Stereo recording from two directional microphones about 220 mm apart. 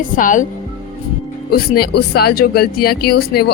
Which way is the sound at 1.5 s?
45° left (ahead or behind).